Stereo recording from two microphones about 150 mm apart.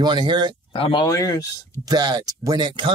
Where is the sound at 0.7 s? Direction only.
35° left (ahead or behind).